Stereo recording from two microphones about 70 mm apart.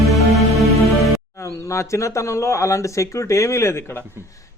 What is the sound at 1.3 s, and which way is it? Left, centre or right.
Speech, left.